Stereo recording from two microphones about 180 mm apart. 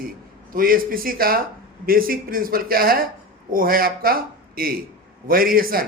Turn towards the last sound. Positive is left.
turn(degrees=-55)  # may be behind; listen again after turning